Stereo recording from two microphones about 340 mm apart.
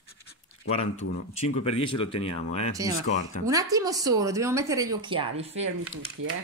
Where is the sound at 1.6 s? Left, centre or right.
Centre.